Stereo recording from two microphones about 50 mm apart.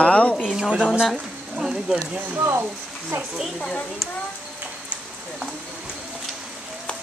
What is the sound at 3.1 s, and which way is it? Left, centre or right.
Speech, right.